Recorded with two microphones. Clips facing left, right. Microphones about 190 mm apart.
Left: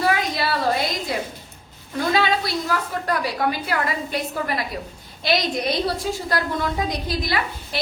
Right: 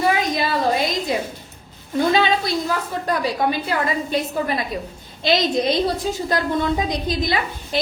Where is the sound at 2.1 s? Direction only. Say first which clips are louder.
Right 2 dB; 20° right (ahead or behind).